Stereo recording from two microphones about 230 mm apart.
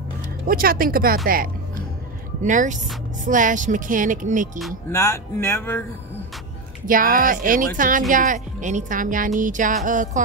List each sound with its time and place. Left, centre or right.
0.5 s speech: right
4.9 s speech: centre
6.9 s speech: right